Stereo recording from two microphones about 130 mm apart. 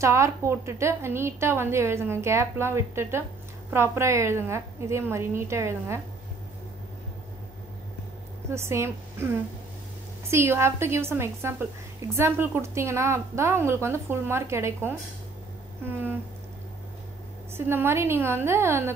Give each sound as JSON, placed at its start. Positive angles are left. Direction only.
{"t": 0.0, "sound": "a woman's voice", "side_deg": -25}
{"t": 8.5, "sound": "a woman's voice", "side_deg": -20}
{"t": 17.6, "sound": "a woman's voice", "side_deg": -20}